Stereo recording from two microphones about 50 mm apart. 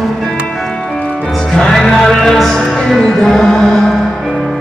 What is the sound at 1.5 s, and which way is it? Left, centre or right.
Music, centre.